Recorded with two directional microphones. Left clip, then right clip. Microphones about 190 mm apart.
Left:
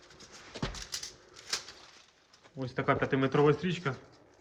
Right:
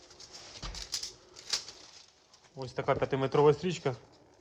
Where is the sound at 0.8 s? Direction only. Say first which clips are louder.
Right 2 dB; 30° right (ahead or behind).